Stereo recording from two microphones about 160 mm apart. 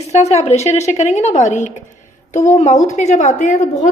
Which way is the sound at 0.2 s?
45° left (ahead or behind).